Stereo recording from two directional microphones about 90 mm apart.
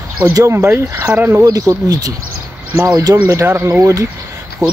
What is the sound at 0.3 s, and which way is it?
Speech, 35° right (ahead or behind).